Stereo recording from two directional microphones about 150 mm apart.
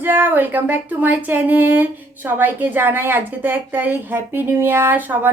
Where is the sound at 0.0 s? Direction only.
15° right (ahead or behind).